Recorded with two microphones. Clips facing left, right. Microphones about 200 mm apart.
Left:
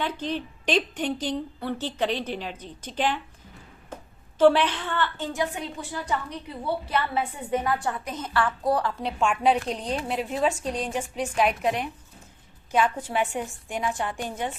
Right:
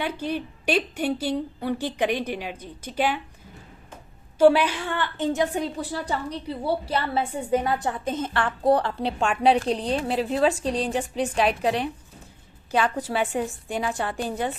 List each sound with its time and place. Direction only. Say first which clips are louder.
0.0 s a woman's voice: right 1 dB; 10° right (ahead or behind)
4.4 s a woman's voice: right 2 dB; 10° right (ahead or behind); by 14.5 s 35° right (ahead or behind)